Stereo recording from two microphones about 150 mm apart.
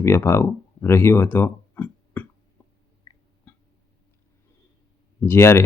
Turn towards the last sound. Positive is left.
turn(degrees=15)  # may be behind; listen again after turning